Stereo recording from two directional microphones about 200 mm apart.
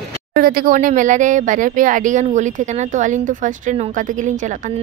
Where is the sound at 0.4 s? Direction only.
45° right (ahead or behind).